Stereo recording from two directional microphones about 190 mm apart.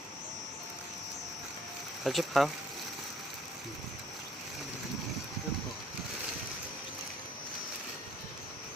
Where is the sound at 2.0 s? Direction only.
Centre (ahead or behind).